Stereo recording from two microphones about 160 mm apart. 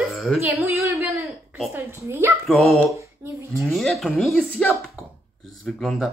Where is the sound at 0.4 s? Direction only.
15° right (ahead or behind).